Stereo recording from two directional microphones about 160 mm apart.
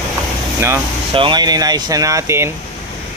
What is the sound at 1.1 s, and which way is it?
Speech, 30° right (ahead or behind).